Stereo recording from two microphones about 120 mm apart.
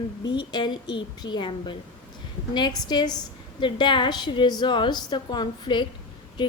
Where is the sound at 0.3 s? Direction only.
40° left (ahead or behind).